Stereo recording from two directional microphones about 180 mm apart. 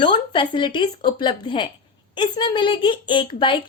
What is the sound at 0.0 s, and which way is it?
A woman's voice, 25° left (ahead or behind).